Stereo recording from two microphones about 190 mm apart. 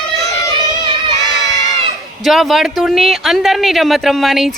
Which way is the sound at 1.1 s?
20° left (ahead or behind).